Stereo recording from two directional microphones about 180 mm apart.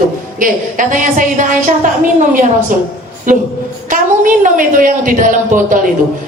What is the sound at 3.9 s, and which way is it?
Speech, 45° right (ahead or behind).